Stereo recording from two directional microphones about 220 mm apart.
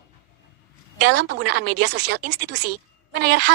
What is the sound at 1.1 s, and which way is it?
Speech, 50° right (ahead or behind).